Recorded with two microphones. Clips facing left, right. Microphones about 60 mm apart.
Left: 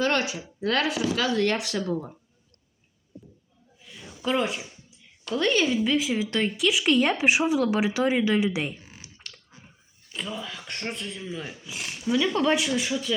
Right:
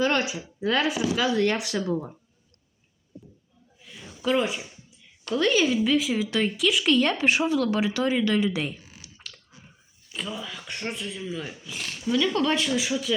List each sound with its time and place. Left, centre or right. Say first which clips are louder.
0.0 s speech: right 1 dB; centre
3.8 s a sound: even; centre
4.2 s a woman's voice: right 1 dB; centre
8.8 s typing: left 1 dB; left
9.2 s chewing: right 1 dB; centre
10.1 s a woman's voice: even; centre
12.7 s speech: right 1 dB; centre